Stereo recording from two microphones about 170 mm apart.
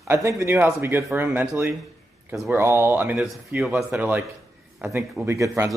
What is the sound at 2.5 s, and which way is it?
Speech, 15° right (ahead or behind).